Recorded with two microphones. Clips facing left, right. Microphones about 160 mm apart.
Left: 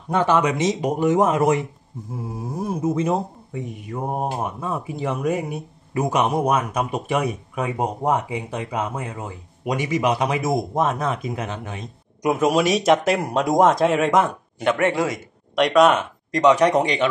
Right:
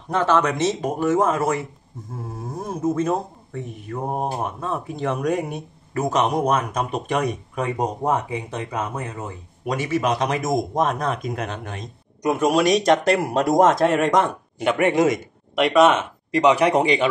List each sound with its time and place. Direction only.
0.1 s speech: 15° left (ahead or behind)
14.6 s speech: 10° right (ahead or behind)
15.5 s speech: 5° right (ahead or behind)